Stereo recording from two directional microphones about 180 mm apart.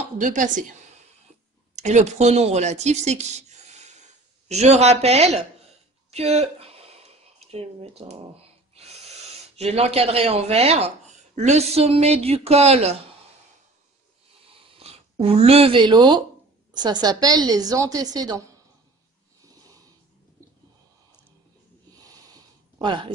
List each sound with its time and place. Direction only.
0.2 s a woman's voice: 45° right (ahead or behind)
1.8 s a woman's voice: 40° right (ahead or behind)
14.8 s a woman's voice: 35° right (ahead or behind)
22.0 s a sound: 20° right (ahead or behind)